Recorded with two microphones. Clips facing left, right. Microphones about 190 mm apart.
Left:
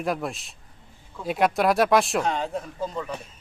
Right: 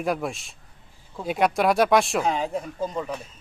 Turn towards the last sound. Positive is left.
turn(degrees=-15)  # may be behind; listen again after turning